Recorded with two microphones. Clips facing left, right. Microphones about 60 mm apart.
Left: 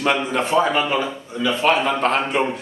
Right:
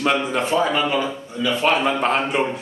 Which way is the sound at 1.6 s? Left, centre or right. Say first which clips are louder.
Left 1 dB; centre.